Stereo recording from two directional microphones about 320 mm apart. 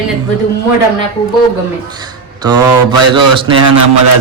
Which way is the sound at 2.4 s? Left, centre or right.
Centre.